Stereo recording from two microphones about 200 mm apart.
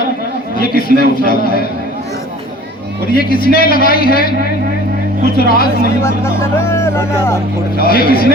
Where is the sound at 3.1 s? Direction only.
45° left (ahead or behind).